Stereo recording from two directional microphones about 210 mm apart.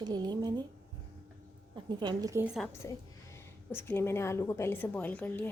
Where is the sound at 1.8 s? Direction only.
20° right (ahead or behind).